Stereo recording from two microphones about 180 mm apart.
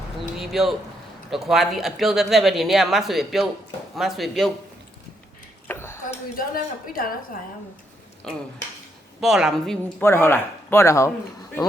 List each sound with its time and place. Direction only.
0.2 s a sound: centre (ahead or behind)
1.3 s speech: centre (ahead or behind)
5.6 s a sound: 15° left (ahead or behind)
6.1 s a woman's voice: 55° left (ahead or behind)
9.2 s speech: centre (ahead or behind)
10.0 s speech: 15° left (ahead or behind)